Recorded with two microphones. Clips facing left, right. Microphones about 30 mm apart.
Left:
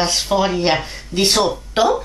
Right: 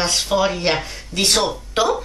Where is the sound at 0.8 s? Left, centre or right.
Centre.